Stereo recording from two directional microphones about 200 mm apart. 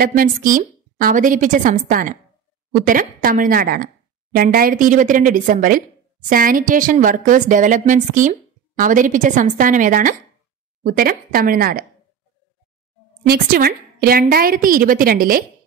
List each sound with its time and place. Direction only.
0.0 s a woman's voice: 45° right (ahead or behind)
13.3 s a woman's voice: 45° right (ahead or behind)